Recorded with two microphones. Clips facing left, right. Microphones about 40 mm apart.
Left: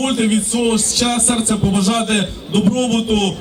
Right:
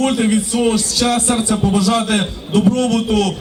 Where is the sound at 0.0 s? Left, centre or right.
Left.